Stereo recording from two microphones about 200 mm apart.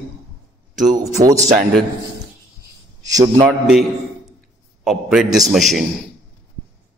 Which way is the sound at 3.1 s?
15° right (ahead or behind).